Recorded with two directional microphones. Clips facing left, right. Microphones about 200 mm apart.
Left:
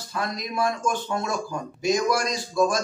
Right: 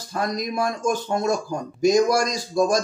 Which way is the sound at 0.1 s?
45° right (ahead or behind).